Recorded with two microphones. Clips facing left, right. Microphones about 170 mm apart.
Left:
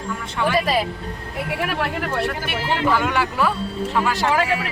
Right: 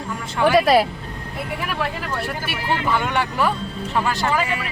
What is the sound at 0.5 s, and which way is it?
Speech, 70° right (ahead or behind).